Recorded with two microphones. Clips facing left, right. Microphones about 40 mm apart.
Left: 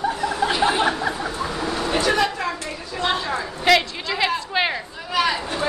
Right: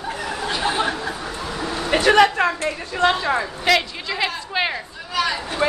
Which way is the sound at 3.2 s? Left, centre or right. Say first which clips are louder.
Right 4 dB; right.